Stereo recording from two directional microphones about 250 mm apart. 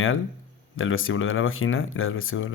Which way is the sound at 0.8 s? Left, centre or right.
Left.